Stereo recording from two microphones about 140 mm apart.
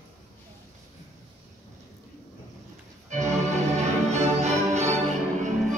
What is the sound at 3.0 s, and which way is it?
Organ, 60° right (ahead or behind).